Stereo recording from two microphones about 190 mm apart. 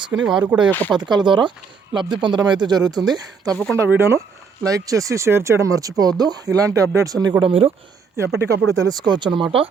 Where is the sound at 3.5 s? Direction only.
5° left (ahead or behind).